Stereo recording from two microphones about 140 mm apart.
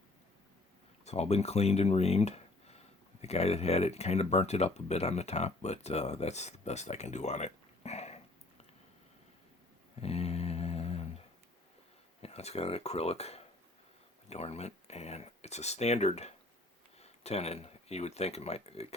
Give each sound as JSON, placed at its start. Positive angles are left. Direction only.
{"t": 1.0, "sound": "speech", "side_deg": 50}
{"t": 10.0, "sound": "a sound", "side_deg": 45}
{"t": 12.2, "sound": "speech", "side_deg": 50}